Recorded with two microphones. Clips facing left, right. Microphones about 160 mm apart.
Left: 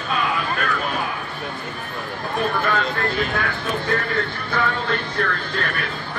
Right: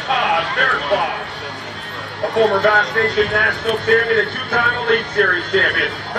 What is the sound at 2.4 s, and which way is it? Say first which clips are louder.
Speech: right 8 dB; 75° right (ahead or behind).